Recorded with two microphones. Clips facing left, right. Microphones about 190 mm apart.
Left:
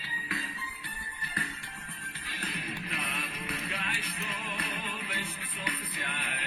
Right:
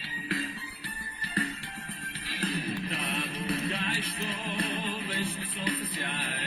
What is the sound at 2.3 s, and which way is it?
Music, 35° right (ahead or behind).